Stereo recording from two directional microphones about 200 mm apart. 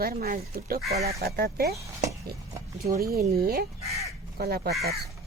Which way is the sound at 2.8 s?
50° right (ahead or behind).